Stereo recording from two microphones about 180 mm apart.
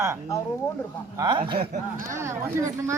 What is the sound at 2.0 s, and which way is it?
Speech, 15° right (ahead or behind).